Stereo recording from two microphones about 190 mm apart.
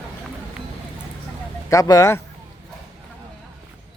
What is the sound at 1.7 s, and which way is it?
Speech, 15° left (ahead or behind).